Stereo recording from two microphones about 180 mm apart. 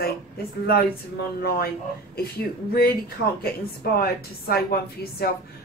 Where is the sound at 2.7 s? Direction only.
55° left (ahead or behind).